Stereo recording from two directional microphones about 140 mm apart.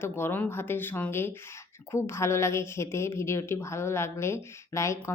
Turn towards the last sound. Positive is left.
turn(degrees=20)  # may be behind; listen again after turning